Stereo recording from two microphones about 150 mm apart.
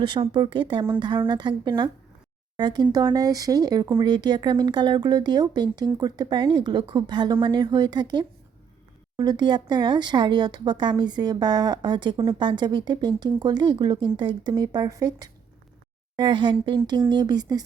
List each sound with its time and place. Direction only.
0.0 s a woman's voice: 30° right (ahead or behind)